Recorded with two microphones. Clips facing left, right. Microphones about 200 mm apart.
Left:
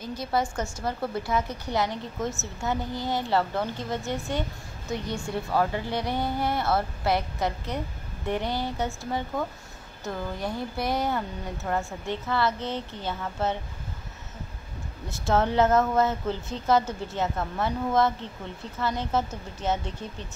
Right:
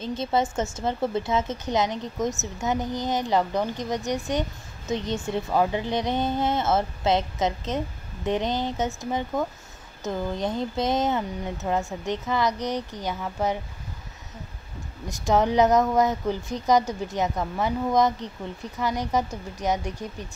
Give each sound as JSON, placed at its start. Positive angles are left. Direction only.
{"t": 0.0, "sound": "a woman's voice", "side_deg": -25}
{"t": 15.0, "sound": "speech", "side_deg": -15}